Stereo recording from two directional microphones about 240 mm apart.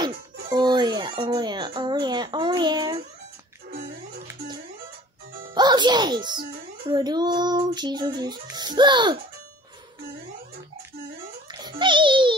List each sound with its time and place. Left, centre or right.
0.0 s speech: centre
3.7 s a sound: right
5.5 s speech: centre
11.5 s music: centre